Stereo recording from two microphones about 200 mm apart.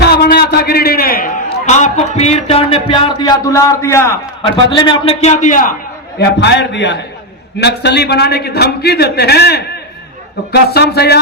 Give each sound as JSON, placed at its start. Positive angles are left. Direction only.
{"t": 0.0, "sound": "a man's voice", "side_deg": 50}
{"t": 4.4, "sound": "a man's voice", "side_deg": 25}
{"t": 6.1, "sound": "a man's voice", "side_deg": 55}